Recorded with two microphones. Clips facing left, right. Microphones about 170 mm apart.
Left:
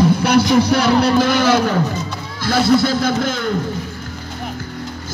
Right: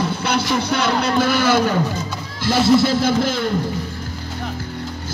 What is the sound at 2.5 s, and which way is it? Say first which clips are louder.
Music: even; 25° right (ahead or behind).